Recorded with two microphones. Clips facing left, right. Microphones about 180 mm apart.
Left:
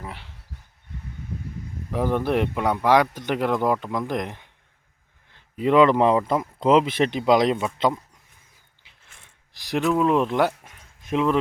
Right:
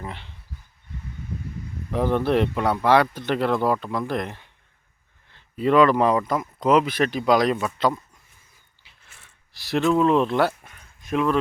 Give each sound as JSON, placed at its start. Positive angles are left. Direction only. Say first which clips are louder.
{"t": 0.0, "sound": "dog", "louder": "right 2 dB", "side_deg": 5}
{"t": 1.9, "sound": "speech", "louder": "right 1 dB", "side_deg": 10}
{"t": 9.0, "sound": "a sound", "louder": "even", "side_deg": -5}
{"t": 9.5, "sound": "speech", "louder": "right 2 dB", "side_deg": 15}